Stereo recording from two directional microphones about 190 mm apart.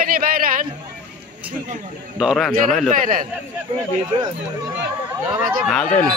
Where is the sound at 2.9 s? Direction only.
45° right (ahead or behind).